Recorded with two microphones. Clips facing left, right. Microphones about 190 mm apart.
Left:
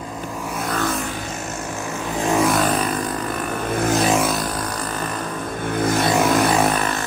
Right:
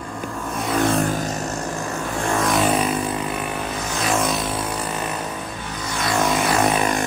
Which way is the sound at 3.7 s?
55° left (ahead or behind).